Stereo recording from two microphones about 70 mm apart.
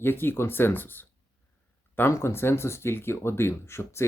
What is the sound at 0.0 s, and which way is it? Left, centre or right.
Speech, left.